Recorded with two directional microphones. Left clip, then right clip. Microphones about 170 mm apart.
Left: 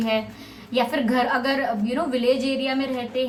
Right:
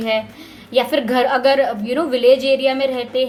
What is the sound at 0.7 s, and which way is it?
A woman's voice, 45° right (ahead or behind).